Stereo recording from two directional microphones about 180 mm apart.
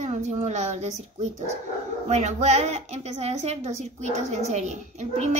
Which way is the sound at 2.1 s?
40° right (ahead or behind).